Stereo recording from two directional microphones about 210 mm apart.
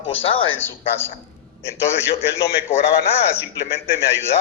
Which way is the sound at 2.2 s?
10° left (ahead or behind).